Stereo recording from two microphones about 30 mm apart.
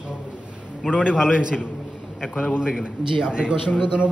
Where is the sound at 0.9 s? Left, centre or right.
Right.